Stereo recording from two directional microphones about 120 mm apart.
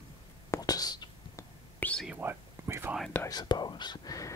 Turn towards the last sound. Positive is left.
turn(degrees=30)  # may be behind; listen again after turning